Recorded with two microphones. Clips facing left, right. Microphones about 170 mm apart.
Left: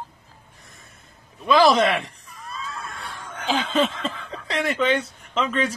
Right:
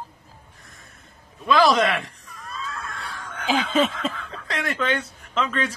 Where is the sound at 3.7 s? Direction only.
Centre (ahead or behind).